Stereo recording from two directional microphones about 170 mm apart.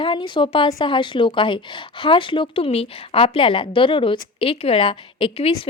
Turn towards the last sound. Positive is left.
turn(degrees=30)  # may be behind; listen again after turning